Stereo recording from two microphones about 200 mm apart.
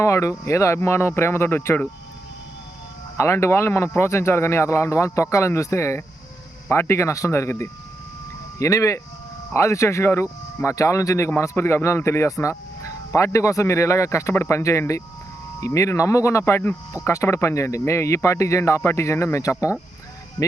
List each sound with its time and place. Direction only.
0.0 s speech: 15° left (ahead or behind)
3.2 s speech: 15° left (ahead or behind)